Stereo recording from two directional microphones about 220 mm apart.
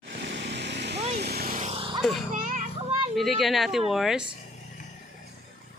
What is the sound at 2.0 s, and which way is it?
Speech, centre (ahead or behind).